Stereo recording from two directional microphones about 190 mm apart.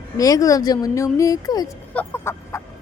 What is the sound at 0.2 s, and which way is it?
Speech, 20° left (ahead or behind).